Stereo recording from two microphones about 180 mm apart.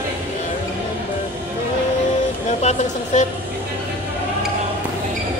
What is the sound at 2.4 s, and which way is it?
Speech, 40° left (ahead or behind).